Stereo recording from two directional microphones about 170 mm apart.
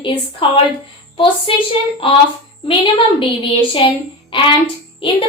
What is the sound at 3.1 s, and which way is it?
A woman's voice, 30° left (ahead or behind).